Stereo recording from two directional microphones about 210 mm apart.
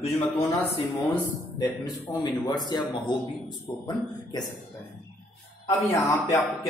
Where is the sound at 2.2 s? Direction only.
20° left (ahead or behind).